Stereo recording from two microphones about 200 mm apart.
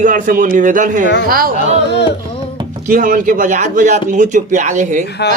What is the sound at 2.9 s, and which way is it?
A man's voice, 40° right (ahead or behind).